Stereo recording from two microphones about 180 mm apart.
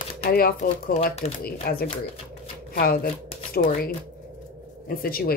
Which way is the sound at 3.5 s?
55° left (ahead or behind).